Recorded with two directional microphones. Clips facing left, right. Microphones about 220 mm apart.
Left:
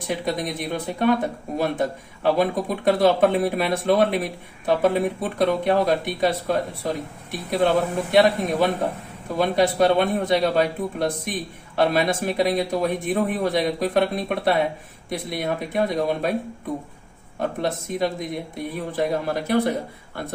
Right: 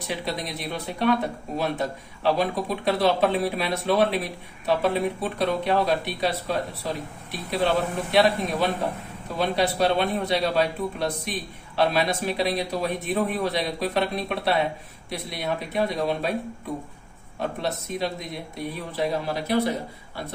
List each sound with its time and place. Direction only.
0.0 s speech: 50° left (ahead or behind)
17.4 s speech: 50° left (ahead or behind)